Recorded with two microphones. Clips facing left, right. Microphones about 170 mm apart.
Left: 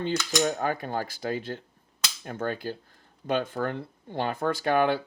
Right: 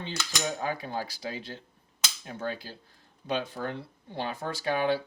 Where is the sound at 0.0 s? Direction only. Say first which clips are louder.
Left 8 dB; 50° left (ahead or behind).